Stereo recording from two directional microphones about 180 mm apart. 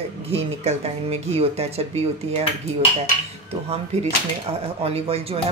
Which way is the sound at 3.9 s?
35° right (ahead or behind).